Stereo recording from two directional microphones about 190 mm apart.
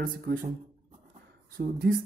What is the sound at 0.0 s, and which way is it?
Speech, 50° right (ahead or behind).